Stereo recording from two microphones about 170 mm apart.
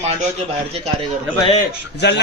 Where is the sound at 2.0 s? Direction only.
85° left.